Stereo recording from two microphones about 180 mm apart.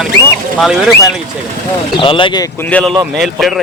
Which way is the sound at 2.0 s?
30° left (ahead or behind).